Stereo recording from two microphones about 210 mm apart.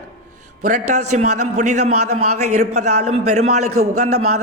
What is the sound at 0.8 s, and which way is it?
Speech, 90° right.